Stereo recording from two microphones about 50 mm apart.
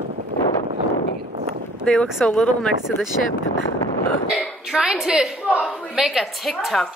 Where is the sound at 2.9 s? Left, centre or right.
Left.